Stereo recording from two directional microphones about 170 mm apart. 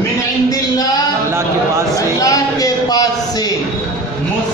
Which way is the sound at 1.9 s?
20° left (ahead or behind).